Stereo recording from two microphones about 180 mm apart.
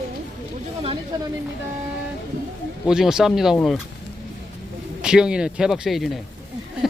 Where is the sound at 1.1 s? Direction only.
20° right (ahead or behind).